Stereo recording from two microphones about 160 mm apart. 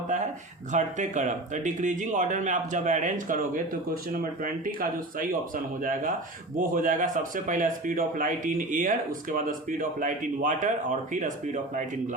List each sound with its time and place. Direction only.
0.7 s speech: 50° right (ahead or behind)